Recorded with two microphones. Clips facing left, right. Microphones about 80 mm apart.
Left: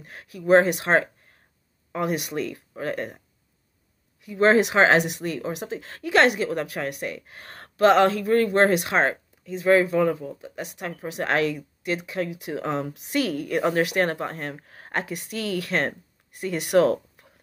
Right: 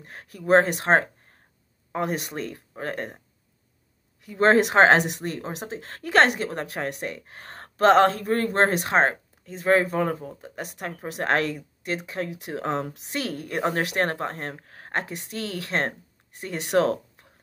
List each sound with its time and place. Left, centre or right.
0.0 s speech: right
4.2 s speech: right
13.1 s a woman's voice: right